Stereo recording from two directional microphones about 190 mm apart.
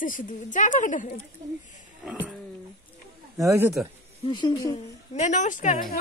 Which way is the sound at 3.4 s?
15° right (ahead or behind).